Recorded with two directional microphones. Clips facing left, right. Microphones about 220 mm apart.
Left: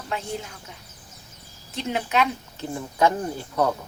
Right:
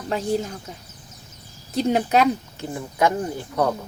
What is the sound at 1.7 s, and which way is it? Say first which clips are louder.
Speech: right 6 dB; 40° right (ahead or behind).